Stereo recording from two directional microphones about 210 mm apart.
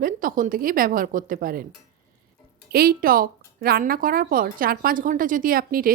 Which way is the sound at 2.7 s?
45° right (ahead or behind).